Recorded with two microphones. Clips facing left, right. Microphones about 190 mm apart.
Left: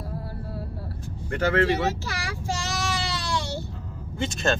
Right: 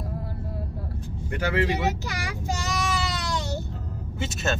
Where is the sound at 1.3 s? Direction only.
10° right (ahead or behind).